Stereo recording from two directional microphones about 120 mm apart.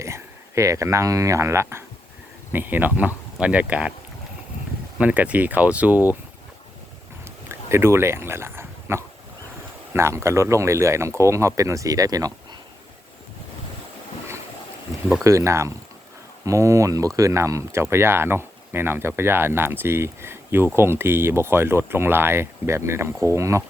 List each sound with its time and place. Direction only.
0.0 s speech: 25° right (ahead or behind)
4.9 s speech: 10° right (ahead or behind)
7.4 s dog: 20° right (ahead or behind)
9.9 s speech: 20° right (ahead or behind)
15.2 s speech: 25° right (ahead or behind)